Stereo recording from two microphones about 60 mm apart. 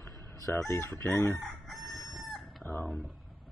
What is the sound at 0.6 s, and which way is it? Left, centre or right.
Chicken, left.